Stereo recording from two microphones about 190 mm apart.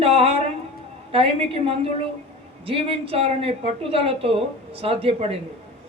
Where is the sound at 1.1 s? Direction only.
30° right (ahead or behind).